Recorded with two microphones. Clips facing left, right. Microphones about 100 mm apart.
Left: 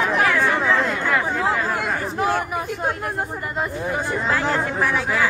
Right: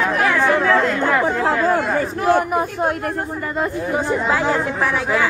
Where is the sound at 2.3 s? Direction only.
55° right (ahead or behind).